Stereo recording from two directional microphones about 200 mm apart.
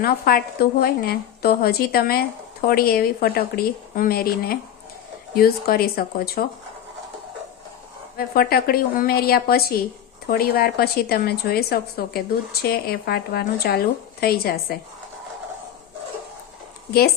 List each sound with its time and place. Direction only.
0.0 s a woman's voice: 50° left (ahead or behind)
8.3 s a woman's voice: 50° left (ahead or behind)